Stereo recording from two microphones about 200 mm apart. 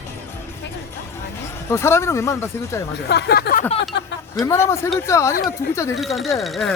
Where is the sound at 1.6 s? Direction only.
15° left (ahead or behind).